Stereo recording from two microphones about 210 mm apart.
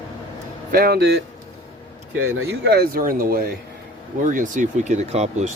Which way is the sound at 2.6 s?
50° right (ahead or behind).